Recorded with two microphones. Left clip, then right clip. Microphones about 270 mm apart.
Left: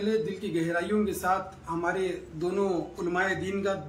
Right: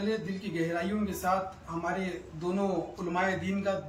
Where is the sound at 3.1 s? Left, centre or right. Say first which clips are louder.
Left 2 dB; centre.